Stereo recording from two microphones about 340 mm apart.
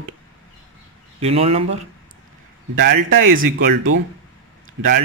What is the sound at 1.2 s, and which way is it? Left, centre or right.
Speech, centre.